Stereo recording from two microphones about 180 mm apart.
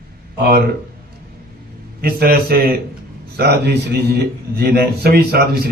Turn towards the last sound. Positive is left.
turn(degrees=-60)  # may be behind; listen again after turning